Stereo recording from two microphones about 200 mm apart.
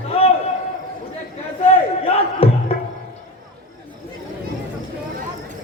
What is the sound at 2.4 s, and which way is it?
Music, 30° left (ahead or behind).